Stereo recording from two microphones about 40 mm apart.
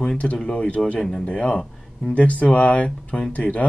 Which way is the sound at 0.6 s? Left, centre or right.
Left.